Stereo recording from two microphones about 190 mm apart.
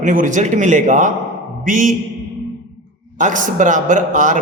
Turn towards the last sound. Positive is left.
turn(degrees=-40)  # may be behind; listen again after turning